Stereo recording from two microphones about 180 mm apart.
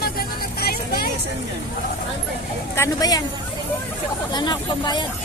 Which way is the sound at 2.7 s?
15° left (ahead or behind).